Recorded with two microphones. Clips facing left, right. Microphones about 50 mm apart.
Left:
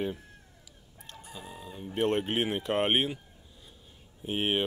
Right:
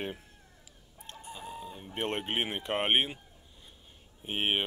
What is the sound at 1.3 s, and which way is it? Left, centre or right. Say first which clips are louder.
Speech: right 2 dB; centre.